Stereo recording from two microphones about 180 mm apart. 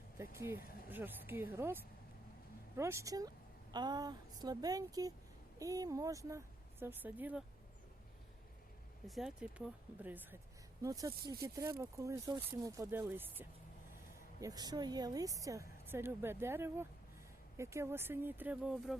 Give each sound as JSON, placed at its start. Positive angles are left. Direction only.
{"t": 0.2, "sound": "a woman's voice", "side_deg": -15}
{"t": 9.0, "sound": "a woman's voice", "side_deg": 0}
{"t": 14.4, "sound": "a woman's voice", "side_deg": -20}